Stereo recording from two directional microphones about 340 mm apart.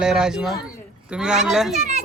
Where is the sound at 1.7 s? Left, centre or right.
Centre.